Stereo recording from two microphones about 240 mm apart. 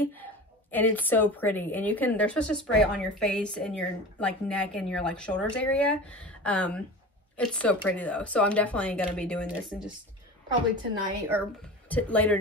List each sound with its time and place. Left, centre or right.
0.0 s a woman's voice: centre
10.5 s a woman's voice: centre
11.9 s speech: centre